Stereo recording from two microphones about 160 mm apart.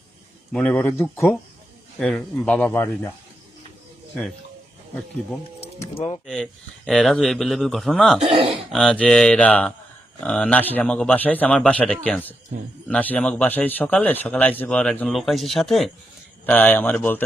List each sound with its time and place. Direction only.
0.5 s a man's voice: 5° left (ahead or behind)
5.9 s speech: 40° left (ahead or behind)
6.2 s a man's voice: 5° left (ahead or behind)
8.2 s speech: 35° right (ahead or behind)
8.7 s a man's voice: 5° left (ahead or behind)